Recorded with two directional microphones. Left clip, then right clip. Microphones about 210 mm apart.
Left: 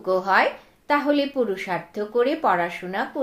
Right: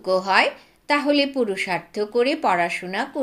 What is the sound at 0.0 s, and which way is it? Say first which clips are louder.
A woman's voice: right 1 dB; 35° right (ahead or behind).